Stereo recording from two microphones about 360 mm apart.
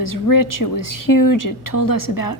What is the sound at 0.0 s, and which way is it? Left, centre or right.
A woman's voice, left.